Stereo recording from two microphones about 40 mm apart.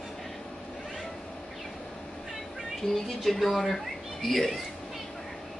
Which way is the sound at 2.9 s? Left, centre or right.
Centre.